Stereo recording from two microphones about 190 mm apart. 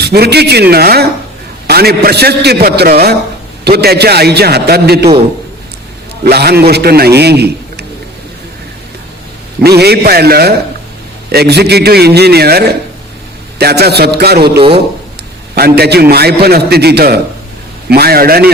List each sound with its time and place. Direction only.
0.0 s a man's voice: 60° right (ahead or behind)
6.2 s a man's voice: 55° right (ahead or behind)
9.6 s a man's voice: 60° right (ahead or behind)